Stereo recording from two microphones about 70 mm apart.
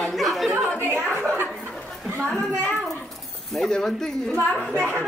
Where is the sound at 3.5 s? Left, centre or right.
Centre.